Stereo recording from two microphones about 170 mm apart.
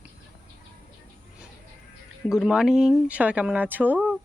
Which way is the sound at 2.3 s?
5° right (ahead or behind).